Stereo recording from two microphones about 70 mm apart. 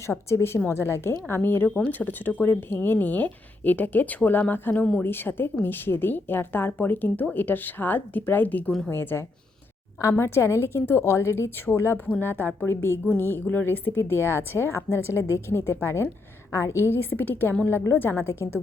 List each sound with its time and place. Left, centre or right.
0.1 s a woman's voice: left